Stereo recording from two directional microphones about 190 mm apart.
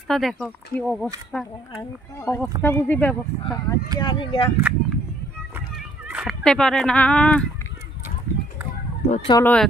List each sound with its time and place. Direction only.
0.1 s speech: centre (ahead or behind)
4.0 s speech: 25° left (ahead or behind)
4.6 s speech: 10° right (ahead or behind)
6.0 s a sound: 5° right (ahead or behind)
6.4 s speech: 5° left (ahead or behind)
9.3 s speech: 10° left (ahead or behind)